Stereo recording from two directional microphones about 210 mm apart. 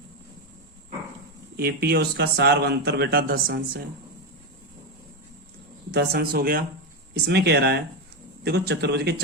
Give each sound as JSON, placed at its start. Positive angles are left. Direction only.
{"t": 1.5, "sound": "speech", "side_deg": -45}
{"t": 5.9, "sound": "speech", "side_deg": -45}
{"t": 7.1, "sound": "speech", "side_deg": -55}